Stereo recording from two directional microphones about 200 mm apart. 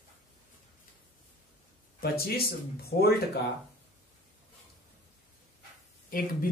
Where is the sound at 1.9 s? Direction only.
50° left (ahead or behind).